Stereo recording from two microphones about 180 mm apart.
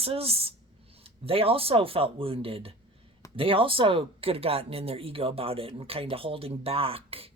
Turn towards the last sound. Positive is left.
turn(degrees=-30)  # may be behind; listen again after turning